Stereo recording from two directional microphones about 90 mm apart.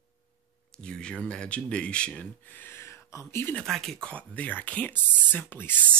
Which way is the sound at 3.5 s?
5° left (ahead or behind).